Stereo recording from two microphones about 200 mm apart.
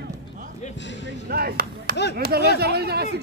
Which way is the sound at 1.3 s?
50° right (ahead or behind).